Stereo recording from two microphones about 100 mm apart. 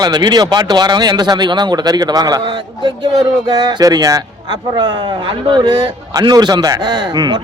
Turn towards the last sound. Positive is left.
turn(degrees=-45)  # may be behind; listen again after turning